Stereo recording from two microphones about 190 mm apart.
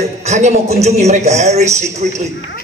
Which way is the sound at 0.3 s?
35° right (ahead or behind).